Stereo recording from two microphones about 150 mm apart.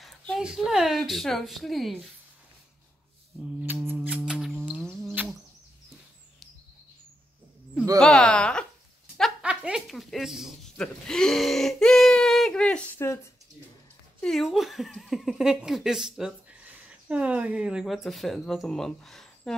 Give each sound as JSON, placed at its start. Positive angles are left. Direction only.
{"t": 0.4, "sound": "speech", "side_deg": -5}
{"t": 3.6, "sound": "a sound", "side_deg": -10}
{"t": 8.0, "sound": "a sound", "side_deg": 5}
{"t": 9.7, "sound": "speech", "side_deg": -5}
{"t": 13.0, "sound": "speech", "side_deg": 20}
{"t": 14.2, "sound": "speech", "side_deg": 0}